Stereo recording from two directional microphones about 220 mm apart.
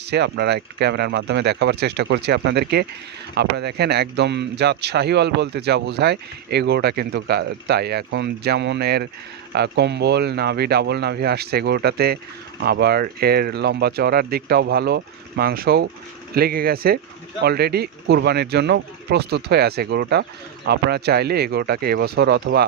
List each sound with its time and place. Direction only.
0.0 s speech: 50° right (ahead or behind)